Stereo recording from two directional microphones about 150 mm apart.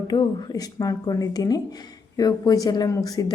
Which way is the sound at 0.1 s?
25° left (ahead or behind).